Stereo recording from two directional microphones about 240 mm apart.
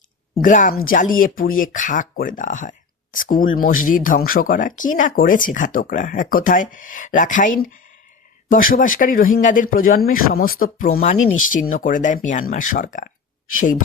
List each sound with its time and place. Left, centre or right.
0.4 s speech: left